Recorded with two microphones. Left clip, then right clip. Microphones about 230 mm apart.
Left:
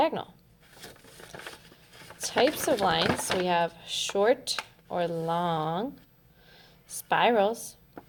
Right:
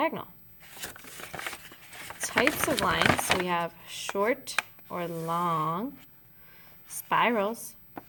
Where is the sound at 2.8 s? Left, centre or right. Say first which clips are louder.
Right 5 dB; right.